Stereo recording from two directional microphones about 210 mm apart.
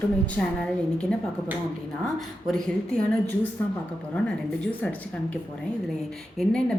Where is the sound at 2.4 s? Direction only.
Centre (ahead or behind).